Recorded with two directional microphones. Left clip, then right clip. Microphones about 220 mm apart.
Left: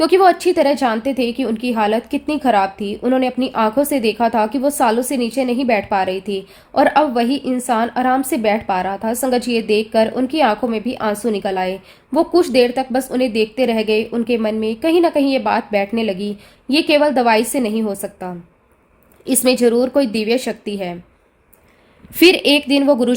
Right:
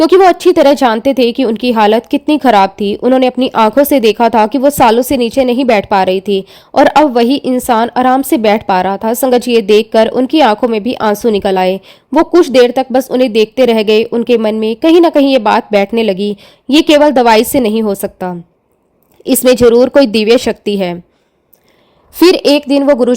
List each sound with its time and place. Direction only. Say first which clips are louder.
0.0 s a woman's voice: right 6 dB; 35° right (ahead or behind)
22.1 s a woman's voice: right 4 dB; 30° right (ahead or behind)